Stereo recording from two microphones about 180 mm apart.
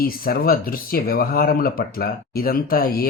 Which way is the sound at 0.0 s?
55° left (ahead or behind).